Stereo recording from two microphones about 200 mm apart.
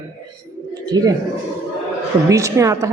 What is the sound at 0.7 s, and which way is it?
Chink, 20° right (ahead or behind).